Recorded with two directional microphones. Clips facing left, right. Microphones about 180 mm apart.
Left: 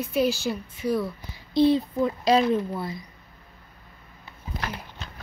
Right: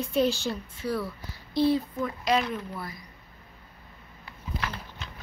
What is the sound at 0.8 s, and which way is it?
Speech, 15° left (ahead or behind).